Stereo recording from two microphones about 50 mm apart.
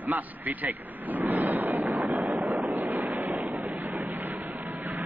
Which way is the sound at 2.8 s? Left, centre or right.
Right.